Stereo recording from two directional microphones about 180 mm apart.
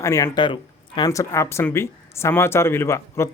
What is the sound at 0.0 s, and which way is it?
Speech, 15° left (ahead or behind).